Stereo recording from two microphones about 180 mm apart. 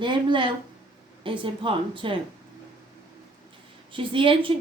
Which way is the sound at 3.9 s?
30° right (ahead or behind).